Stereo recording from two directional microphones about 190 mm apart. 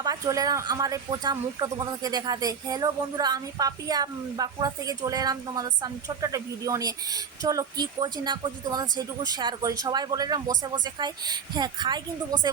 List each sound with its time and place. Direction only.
0.0 s speech: 20° right (ahead or behind)